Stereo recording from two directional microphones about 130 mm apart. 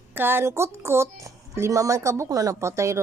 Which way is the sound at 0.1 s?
15° right (ahead or behind).